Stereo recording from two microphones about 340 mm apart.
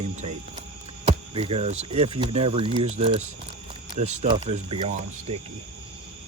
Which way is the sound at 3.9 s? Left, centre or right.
Centre.